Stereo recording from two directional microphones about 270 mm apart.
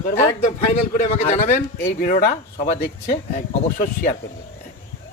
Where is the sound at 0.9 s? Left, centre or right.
Left.